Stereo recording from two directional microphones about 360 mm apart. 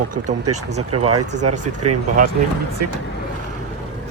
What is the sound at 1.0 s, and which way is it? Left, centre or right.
Speech, right.